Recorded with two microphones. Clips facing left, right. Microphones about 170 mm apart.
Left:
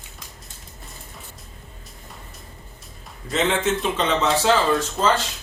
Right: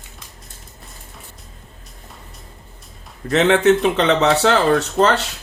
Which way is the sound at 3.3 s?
65° right (ahead or behind).